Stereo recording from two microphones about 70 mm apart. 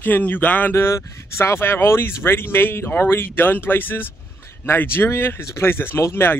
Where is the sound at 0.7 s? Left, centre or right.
Left.